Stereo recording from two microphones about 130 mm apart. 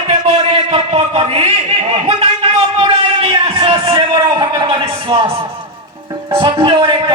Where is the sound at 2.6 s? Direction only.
45° right (ahead or behind).